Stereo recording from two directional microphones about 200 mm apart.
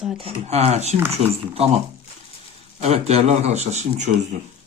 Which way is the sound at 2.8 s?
30° right (ahead or behind).